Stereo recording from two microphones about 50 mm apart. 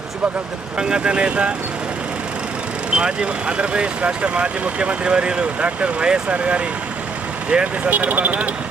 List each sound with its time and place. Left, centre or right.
0.8 s speech: centre
2.9 s speech: centre; by 8.4 s right